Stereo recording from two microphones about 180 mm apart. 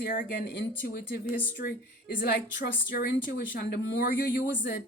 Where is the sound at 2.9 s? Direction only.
55° left (ahead or behind).